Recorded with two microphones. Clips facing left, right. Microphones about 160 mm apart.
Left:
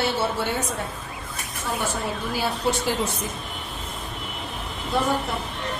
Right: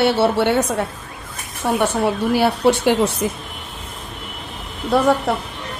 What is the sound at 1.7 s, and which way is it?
A woman's voice, 70° right (ahead or behind).